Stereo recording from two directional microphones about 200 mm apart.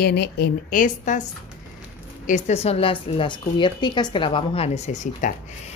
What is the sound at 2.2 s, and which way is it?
A woman's voice, 35° left (ahead or behind).